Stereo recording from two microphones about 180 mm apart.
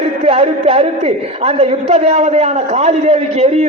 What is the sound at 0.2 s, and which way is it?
A man's voice, 35° right (ahead or behind).